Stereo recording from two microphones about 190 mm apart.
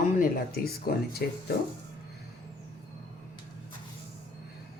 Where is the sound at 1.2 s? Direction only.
60° left (ahead or behind).